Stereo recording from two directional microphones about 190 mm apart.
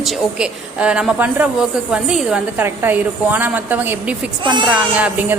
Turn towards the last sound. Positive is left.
turn(degrees=-10)  # may be behind; listen again after turning